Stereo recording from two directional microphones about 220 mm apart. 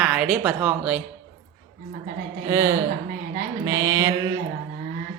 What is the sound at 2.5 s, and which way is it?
Speech, 10° right (ahead or behind).